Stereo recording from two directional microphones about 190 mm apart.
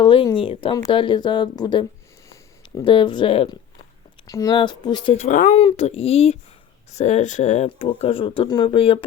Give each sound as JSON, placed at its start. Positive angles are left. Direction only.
{"t": 0.0, "sound": "speech", "side_deg": 25}